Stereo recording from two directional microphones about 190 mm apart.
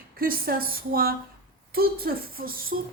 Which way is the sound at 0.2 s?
50° right (ahead or behind).